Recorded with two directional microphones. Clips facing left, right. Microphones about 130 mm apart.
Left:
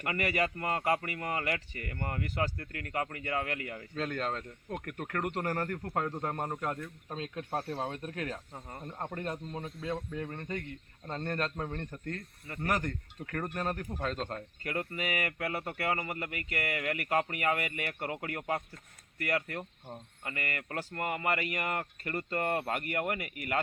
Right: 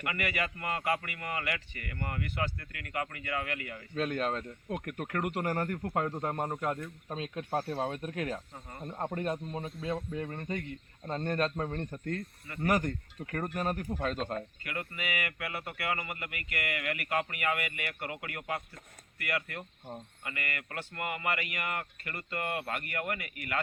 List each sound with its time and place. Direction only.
0.0 s speech: 35° left (ahead or behind)
3.9 s a man's voice: 15° right (ahead or behind)
14.6 s speech: 35° left (ahead or behind)